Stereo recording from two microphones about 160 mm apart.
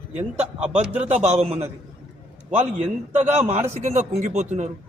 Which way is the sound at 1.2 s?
45° right (ahead or behind).